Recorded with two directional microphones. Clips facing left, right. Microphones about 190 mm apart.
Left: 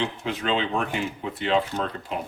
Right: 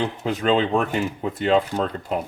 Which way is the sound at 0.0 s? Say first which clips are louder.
Right 5 dB; 45° right (ahead or behind).